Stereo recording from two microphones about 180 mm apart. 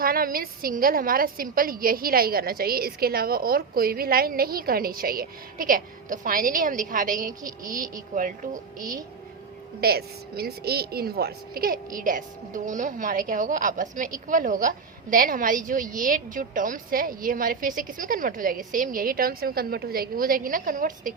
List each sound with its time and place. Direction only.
0.0 s a woman's voice: 55° right (ahead or behind)
9.8 s a woman's voice: 60° right (ahead or behind)